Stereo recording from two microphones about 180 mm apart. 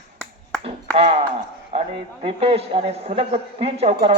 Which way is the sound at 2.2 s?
30° right (ahead or behind).